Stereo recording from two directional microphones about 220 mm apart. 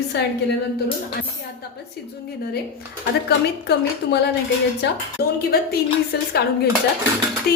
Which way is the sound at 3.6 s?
50° left (ahead or behind).